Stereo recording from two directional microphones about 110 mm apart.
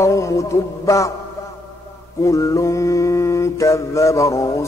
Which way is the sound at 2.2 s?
30° left (ahead or behind).